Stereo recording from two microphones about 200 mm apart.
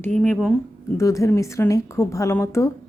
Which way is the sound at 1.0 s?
15° left (ahead or behind).